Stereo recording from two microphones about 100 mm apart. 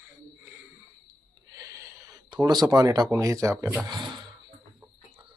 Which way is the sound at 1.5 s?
35° right (ahead or behind).